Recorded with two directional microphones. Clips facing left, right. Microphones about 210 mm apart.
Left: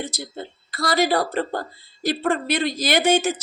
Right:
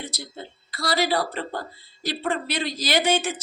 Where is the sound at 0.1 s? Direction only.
50° left (ahead or behind).